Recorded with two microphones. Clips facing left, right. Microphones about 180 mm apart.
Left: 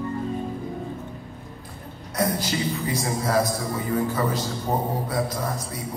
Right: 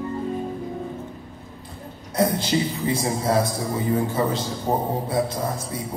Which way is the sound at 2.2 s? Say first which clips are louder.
Right 3 dB; 25° right (ahead or behind).